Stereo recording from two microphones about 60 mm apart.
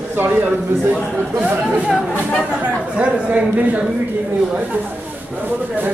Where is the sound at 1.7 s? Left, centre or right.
Centre.